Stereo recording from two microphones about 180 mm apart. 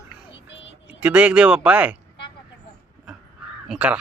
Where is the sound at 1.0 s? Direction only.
5° right (ahead or behind).